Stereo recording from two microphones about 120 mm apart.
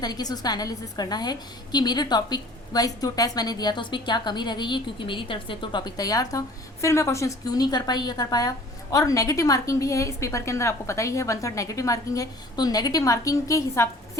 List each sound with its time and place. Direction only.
0.0 s a woman's voice: 35° left (ahead or behind)